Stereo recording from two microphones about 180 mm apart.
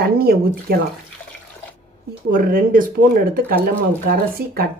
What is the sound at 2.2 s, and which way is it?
Speech, 50° right (ahead or behind).